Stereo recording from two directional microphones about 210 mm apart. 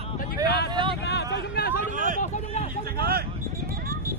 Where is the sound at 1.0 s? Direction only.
55° left (ahead or behind).